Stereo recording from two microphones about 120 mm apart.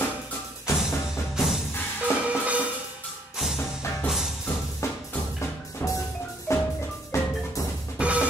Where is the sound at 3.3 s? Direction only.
5° right (ahead or behind).